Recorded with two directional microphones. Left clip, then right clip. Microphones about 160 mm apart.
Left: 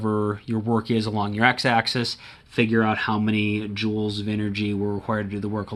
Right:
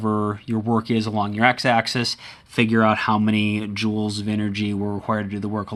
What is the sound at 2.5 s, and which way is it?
Speech, 45° right (ahead or behind).